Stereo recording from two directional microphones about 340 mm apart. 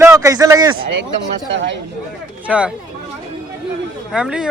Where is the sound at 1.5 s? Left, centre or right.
Right.